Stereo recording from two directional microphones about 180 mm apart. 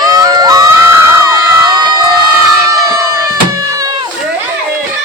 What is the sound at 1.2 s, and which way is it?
Crowd, 20° right (ahead or behind).